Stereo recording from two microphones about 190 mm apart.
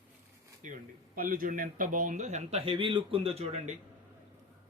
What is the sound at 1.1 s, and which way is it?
A man's voice, 50° right (ahead or behind).